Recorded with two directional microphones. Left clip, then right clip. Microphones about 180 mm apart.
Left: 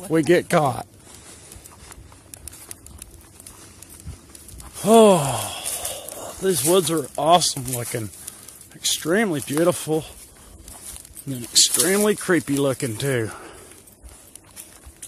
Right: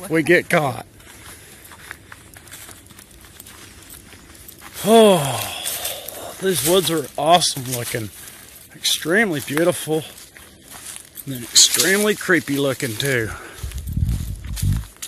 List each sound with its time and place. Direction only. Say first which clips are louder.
0.1 s speech: right 2 dB; 15° left (ahead or behind)
4.8 s a sound: right 1 dB; 10° left (ahead or behind)
6.6 s speech: right 2 dB; 5° left (ahead or behind)
11.2 s speech: right 4 dB; 15° left (ahead or behind)